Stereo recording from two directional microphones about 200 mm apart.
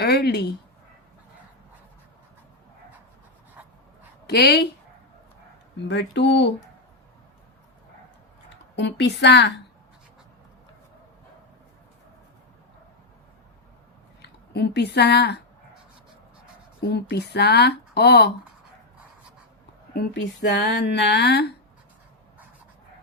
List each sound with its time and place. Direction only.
0.0 s speech: 55° left (ahead or behind)
4.3 s speech: 55° left (ahead or behind)
5.9 s speech: 60° left (ahead or behind)
8.7 s speech: 60° left (ahead or behind)
14.2 s speech: 55° left (ahead or behind)
16.8 s speech: 55° left (ahead or behind)
19.9 s speech: 55° left (ahead or behind)